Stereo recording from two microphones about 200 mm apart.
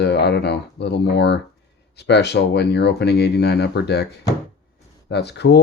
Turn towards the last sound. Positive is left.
turn(degrees=55)  # may be behind; listen again after turning